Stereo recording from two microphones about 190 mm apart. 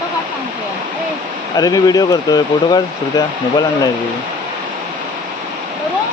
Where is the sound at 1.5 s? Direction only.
20° left (ahead or behind).